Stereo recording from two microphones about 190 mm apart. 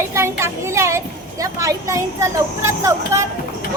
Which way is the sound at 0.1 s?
15° right (ahead or behind).